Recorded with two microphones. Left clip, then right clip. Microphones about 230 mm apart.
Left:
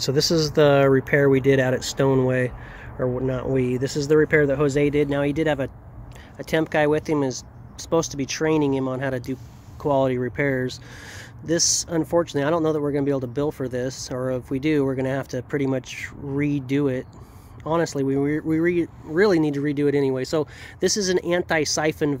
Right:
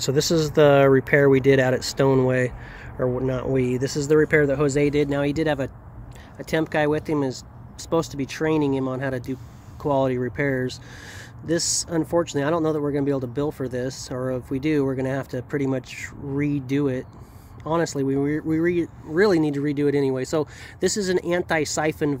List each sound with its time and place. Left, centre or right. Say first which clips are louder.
0.0 s speech: even; centre
0.8 s speech: right 1 dB; centre
3.8 s speech: even; right
4.1 s speech: even; centre
7.2 s speech: left 1 dB; left
8.3 s speech: left 1 dB; centre
11.1 s a sound: left 1 dB; centre
11.9 s speech: left 1 dB; centre
13.8 s speech: left 1 dB; left
14.1 s speech: left 1 dB; centre